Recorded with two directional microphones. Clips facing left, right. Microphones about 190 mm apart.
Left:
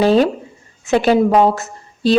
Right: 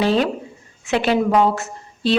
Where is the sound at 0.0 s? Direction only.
40° left (ahead or behind).